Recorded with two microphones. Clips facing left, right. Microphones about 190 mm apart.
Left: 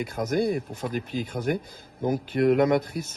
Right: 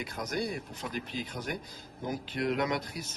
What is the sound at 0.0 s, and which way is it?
Speech, 50° left (ahead or behind).